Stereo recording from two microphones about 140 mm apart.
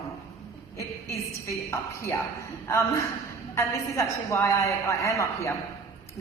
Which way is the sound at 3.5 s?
20° left (ahead or behind).